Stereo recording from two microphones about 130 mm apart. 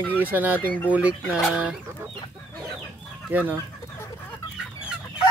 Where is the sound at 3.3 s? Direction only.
15° right (ahead or behind).